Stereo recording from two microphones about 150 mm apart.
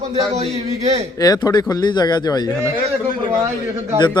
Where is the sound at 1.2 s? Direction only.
25° left (ahead or behind).